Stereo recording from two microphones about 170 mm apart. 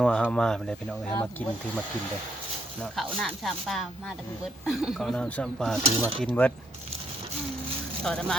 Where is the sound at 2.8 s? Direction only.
Centre (ahead or behind).